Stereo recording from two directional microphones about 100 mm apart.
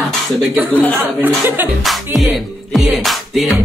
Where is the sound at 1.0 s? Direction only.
20° right (ahead or behind).